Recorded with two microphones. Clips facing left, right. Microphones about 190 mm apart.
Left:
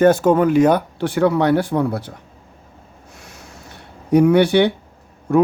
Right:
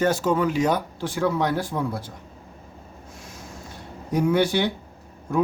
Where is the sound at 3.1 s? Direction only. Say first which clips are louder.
Even; 70° left (ahead or behind).